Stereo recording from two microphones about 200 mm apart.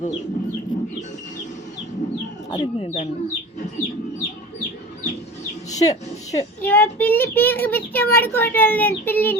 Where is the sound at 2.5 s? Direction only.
30° left (ahead or behind).